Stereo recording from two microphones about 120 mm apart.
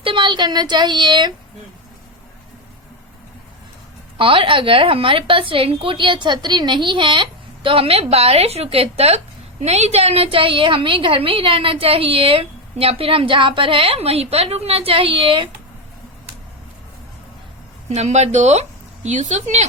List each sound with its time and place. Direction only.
0.0 s a woman's voice: 45° right (ahead or behind)
4.2 s a woman's voice: 45° right (ahead or behind)
17.8 s speech: 70° right (ahead or behind)
19.0 s speech: 85° right